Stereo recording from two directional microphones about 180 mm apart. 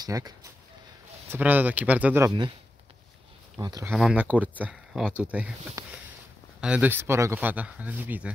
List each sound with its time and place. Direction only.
0.0 s speech: 20° right (ahead or behind)
1.3 s speech: 10° right (ahead or behind)
3.8 s speech: 5° right (ahead or behind)
5.8 s speech: 20° right (ahead or behind)
6.6 s speech: 10° right (ahead or behind)